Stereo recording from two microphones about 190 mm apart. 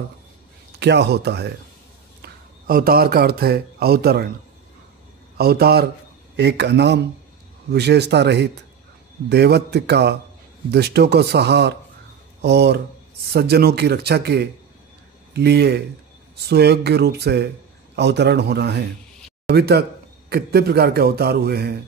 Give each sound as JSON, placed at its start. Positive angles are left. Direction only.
{"t": 0.7, "sound": "a man's voice", "side_deg": -60}
{"t": 2.2, "sound": "a man's voice", "side_deg": -50}
{"t": 5.4, "sound": "a man's voice", "side_deg": -55}